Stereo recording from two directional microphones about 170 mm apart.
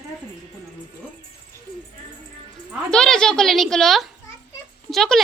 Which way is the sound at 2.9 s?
5° left (ahead or behind).